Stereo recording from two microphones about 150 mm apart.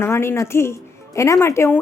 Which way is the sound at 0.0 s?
15° left (ahead or behind).